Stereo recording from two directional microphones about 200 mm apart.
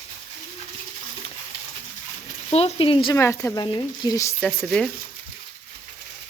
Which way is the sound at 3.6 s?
25° left (ahead or behind).